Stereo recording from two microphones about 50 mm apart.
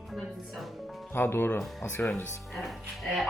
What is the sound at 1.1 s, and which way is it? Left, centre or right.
Speech, left.